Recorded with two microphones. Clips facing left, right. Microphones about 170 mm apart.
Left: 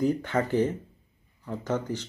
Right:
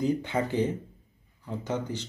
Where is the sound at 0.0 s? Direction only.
15° right (ahead or behind).